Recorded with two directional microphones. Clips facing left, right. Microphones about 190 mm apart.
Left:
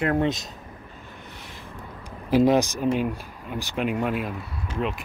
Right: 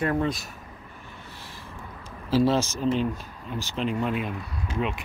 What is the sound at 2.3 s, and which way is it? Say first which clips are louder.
Speech: left 3 dB; 15° left (ahead or behind).